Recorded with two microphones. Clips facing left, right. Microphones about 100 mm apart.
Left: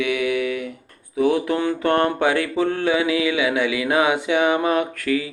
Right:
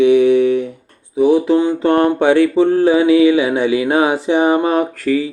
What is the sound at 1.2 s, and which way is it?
Speech, 20° right (ahead or behind).